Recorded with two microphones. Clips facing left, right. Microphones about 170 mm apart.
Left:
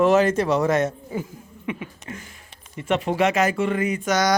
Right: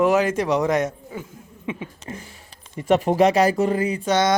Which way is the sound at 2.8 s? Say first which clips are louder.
Right 4 dB; 40° right (ahead or behind).